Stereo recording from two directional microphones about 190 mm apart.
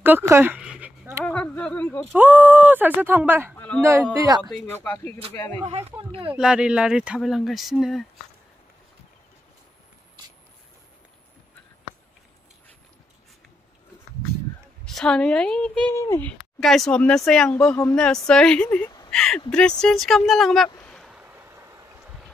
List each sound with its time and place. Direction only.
0.0 s a sound: 10° right (ahead or behind)
1.2 s a sound: 10° left (ahead or behind)
2.1 s speech: 10° right (ahead or behind)
3.5 s a sound: 10° left (ahead or behind)
4.4 s a woman's voice: centre (ahead or behind)
4.6 s speech: 10° left (ahead or behind)
5.7 s speech: 30° right (ahead or behind)
6.3 s a woman's voice: 5° right (ahead or behind)
14.9 s a woman's voice: 5° left (ahead or behind)
20.8 s boat: centre (ahead or behind); by 21.8 s 15° right (ahead or behind)